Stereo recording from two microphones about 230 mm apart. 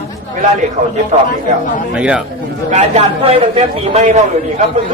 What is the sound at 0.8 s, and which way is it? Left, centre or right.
Speech, right.